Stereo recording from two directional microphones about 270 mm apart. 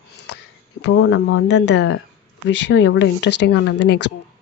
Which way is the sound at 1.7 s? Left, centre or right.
Left.